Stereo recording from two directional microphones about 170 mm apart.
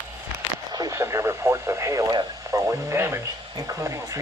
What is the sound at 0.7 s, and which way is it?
Speech, 20° right (ahead or behind).